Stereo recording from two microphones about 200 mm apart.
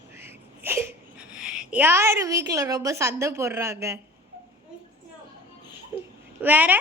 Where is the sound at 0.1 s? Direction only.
10° right (ahead or behind).